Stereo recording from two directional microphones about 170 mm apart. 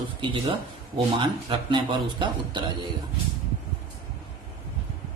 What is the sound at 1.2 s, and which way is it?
Speech, 30° right (ahead or behind).